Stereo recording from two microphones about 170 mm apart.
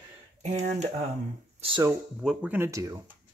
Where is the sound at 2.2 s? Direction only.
10° right (ahead or behind).